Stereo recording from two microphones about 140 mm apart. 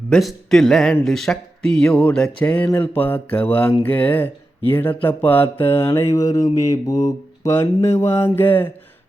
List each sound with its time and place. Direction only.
0.1 s speech: centre (ahead or behind)